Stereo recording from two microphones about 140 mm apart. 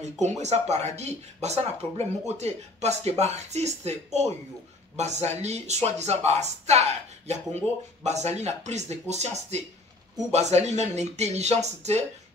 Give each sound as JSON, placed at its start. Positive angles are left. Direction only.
{"t": 0.0, "sound": "speech", "side_deg": -55}